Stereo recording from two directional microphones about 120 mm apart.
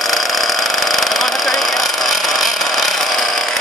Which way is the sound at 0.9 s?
Centre (ahead or behind).